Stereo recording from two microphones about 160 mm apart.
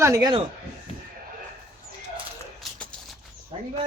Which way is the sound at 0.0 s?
20° right (ahead or behind).